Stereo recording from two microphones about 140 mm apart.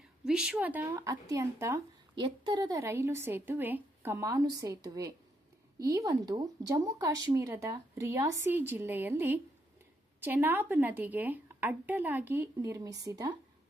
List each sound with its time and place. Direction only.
0.3 s speech: 5° right (ahead or behind)
0.9 s speech: 25° right (ahead or behind)
2.1 s a woman's voice: 35° right (ahead or behind)